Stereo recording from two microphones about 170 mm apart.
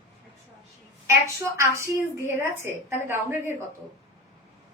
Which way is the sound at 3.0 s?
15° right (ahead or behind).